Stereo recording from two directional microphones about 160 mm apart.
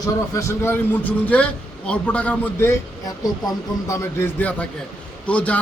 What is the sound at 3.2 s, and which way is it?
A man's voice, 20° left (ahead or behind).